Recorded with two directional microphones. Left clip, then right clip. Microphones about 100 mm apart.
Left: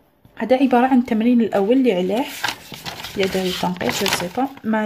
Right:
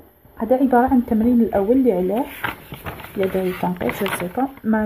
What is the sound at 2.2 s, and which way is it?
Speech, 15° left (ahead or behind).